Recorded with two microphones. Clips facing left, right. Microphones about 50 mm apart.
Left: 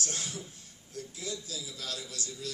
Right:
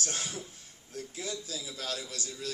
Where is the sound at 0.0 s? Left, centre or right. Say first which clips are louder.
Right 1 dB; right.